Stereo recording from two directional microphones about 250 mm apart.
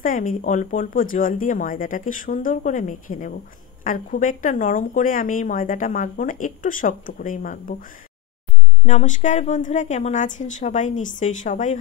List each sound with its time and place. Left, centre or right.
0.0 s a woman's voice: left